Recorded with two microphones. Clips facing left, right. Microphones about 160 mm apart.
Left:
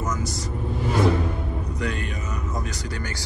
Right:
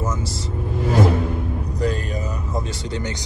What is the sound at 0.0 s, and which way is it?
Vehicle, 25° right (ahead or behind).